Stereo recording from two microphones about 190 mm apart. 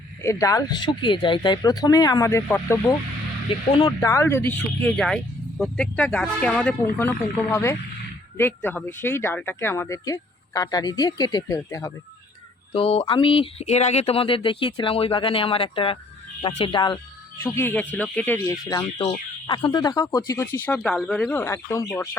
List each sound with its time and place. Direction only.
0.2 s speech: 15° left (ahead or behind)
3.7 s speech: 30° left (ahead or behind)
4.0 s speech: 15° left (ahead or behind)
12.7 s speech: 30° left (ahead or behind)
17.4 s speech: 15° left (ahead or behind)
18.9 s speech: 35° left (ahead or behind); by 21.8 s 15° left (ahead or behind)